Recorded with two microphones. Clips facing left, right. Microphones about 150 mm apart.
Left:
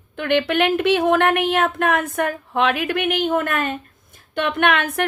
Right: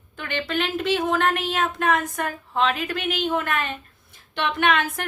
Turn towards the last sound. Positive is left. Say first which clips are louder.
# left 3 dB
turn(degrees=60)  # may be behind; listen again after turning